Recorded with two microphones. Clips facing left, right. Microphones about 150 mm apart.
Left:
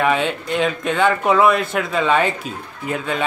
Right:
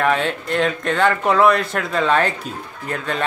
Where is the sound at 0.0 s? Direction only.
5° left (ahead or behind).